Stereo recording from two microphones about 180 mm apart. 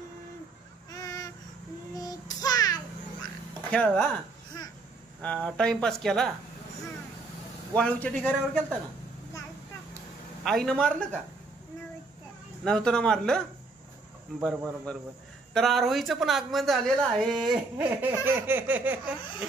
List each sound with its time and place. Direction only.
0.9 s a sound: 20° left (ahead or behind)
2.0 s child singing: 20° left (ahead or behind)
3.7 s a woman's voice: 5° left (ahead or behind)
5.2 s a woman's voice: 5° left (ahead or behind)
7.7 s a man's voice: 5° left (ahead or behind)
10.4 s a woman's voice: centre (ahead or behind)
12.6 s a woman's voice: 5° left (ahead or behind)
14.4 s a woman's voice: 5° left (ahead or behind)